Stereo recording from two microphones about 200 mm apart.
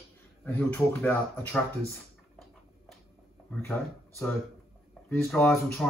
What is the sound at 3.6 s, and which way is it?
Speech, 10° left (ahead or behind).